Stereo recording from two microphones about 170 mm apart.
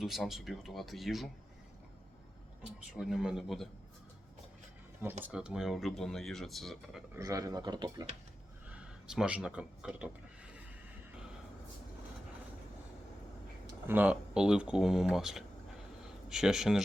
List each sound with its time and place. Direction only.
0.0 s speech: centre (ahead or behind)
3.0 s speech: 5° right (ahead or behind)
5.2 s speech: 5° right (ahead or behind)
7.2 s speech: 20° right (ahead or behind)
8.7 s speech: 5° right (ahead or behind)
13.8 s speech: 10° right (ahead or behind)